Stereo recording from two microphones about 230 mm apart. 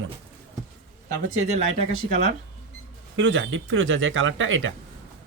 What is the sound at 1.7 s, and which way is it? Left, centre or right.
Speech, right.